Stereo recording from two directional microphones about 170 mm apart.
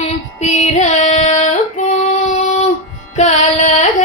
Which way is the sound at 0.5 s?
45° left (ahead or behind).